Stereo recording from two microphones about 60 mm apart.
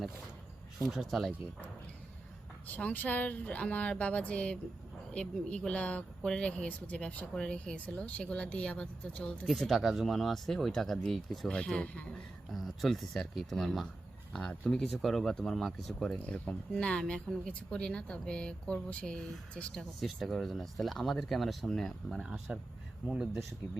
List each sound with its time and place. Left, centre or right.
1.1 s speech: centre
2.7 s speech: left
9.6 s speech: centre
12.5 s speech: centre
16.1 s speech: centre
20.0 s speech: centre
22.2 s speech: centre